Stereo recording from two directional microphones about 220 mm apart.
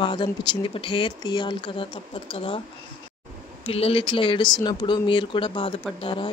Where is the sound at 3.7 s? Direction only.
25° left (ahead or behind).